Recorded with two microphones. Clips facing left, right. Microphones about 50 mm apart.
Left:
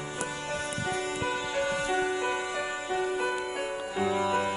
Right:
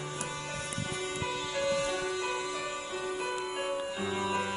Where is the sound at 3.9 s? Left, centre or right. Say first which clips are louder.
Left 10 dB; left.